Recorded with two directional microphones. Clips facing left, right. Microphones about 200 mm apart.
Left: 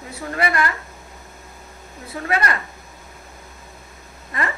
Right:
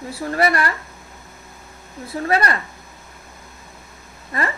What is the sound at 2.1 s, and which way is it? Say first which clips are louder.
Speech: right 3 dB; 35° right (ahead or behind).